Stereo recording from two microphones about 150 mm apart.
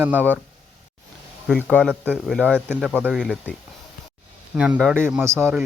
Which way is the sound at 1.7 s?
5° left (ahead or behind).